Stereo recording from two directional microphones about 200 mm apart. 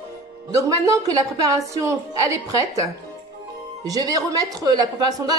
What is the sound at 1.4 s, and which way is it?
A woman's voice, 15° right (ahead or behind).